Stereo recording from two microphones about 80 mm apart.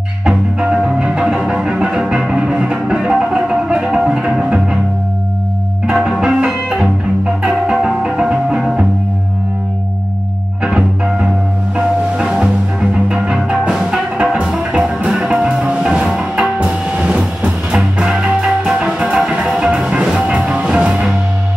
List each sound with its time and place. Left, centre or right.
0.2 s music: centre
5.9 s music: centre
10.6 s music: centre